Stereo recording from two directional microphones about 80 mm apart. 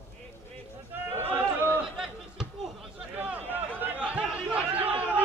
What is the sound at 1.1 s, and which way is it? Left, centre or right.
Chatter, right.